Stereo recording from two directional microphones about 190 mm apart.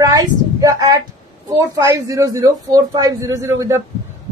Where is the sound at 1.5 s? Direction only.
15° right (ahead or behind).